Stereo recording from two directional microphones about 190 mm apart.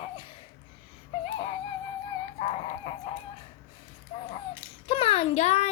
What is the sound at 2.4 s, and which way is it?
Chicken, 30° left (ahead or behind).